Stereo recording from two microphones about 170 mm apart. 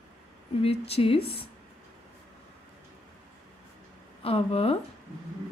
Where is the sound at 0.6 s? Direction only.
35° left (ahead or behind).